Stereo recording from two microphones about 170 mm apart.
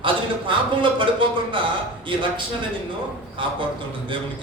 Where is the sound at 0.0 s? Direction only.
30° right (ahead or behind).